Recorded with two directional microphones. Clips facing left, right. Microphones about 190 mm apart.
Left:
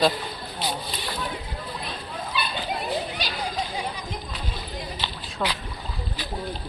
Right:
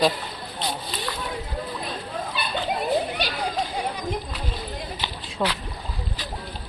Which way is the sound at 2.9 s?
60° right (ahead or behind).